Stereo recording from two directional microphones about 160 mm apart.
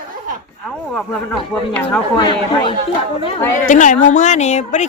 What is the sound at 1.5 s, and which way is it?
Speech, 5° left (ahead or behind).